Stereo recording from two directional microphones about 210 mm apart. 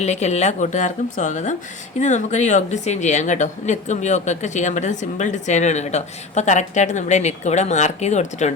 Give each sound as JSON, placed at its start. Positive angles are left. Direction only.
{"t": 0.0, "sound": "a woman's voice", "side_deg": 30}